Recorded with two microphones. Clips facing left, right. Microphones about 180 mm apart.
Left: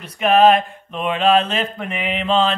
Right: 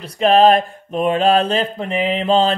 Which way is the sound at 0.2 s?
35° right (ahead or behind).